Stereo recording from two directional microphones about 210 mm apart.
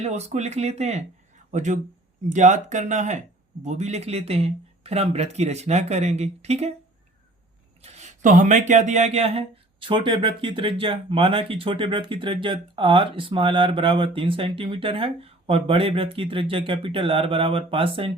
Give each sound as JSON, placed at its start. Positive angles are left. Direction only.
{"t": 0.0, "sound": "speech", "side_deg": -30}
{"t": 7.8, "sound": "speech", "side_deg": -30}